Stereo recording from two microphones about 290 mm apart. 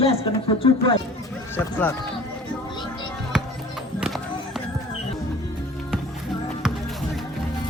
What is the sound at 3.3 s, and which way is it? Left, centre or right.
Music, centre.